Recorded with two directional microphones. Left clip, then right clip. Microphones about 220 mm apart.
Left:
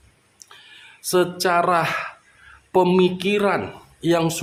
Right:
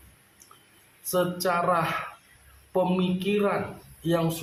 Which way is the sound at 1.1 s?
45° left (ahead or behind).